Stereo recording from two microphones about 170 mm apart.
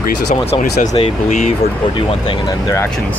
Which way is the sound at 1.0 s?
30° left (ahead or behind).